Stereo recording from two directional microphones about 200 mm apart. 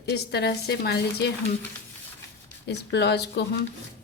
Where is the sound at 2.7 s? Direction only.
55° left (ahead or behind).